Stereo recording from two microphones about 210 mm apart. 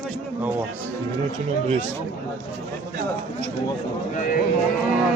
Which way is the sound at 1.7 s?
30° right (ahead or behind).